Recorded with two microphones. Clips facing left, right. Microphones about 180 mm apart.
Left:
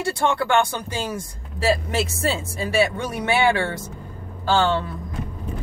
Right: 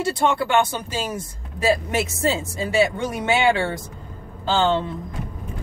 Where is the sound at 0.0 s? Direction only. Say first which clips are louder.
Right 1 dB; 20° right (ahead or behind).